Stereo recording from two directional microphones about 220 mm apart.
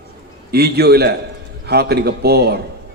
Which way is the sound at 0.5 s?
45° right (ahead or behind).